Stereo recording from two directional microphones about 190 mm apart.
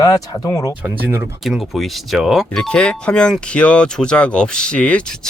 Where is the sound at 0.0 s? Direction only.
15° left (ahead or behind).